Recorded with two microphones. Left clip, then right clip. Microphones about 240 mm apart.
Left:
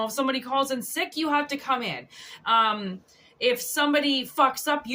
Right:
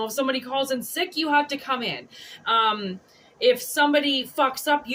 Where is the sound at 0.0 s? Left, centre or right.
Left.